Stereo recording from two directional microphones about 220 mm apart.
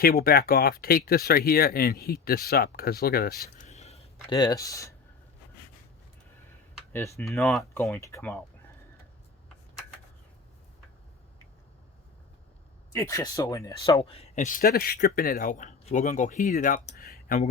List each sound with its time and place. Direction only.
0.0 s speech: 40° left (ahead or behind)
3.7 s a sound: 30° left (ahead or behind)
6.9 s speech: 10° left (ahead or behind)
12.9 s speech: 15° left (ahead or behind)
13.9 s speech: 25° left (ahead or behind)